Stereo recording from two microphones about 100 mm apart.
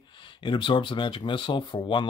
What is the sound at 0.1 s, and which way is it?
Speech, 55° left (ahead or behind).